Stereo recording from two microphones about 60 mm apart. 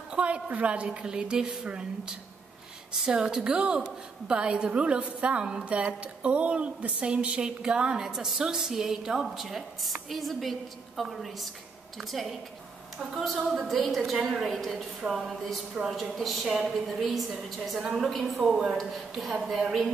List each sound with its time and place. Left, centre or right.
0.1 s a woman's voice: centre
17.7 s a woman's voice: centre
18.8 s a woman's voice: centre